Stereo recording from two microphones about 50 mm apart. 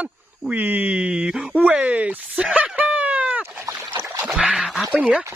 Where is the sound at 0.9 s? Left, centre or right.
Right.